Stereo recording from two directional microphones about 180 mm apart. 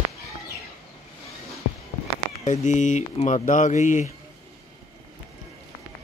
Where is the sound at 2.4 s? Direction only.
40° left (ahead or behind).